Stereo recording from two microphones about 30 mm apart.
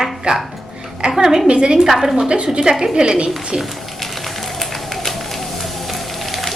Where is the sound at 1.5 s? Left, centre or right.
Right.